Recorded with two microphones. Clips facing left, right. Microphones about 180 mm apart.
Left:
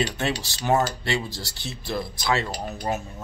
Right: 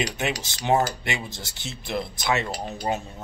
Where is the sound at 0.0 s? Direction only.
20° right (ahead or behind).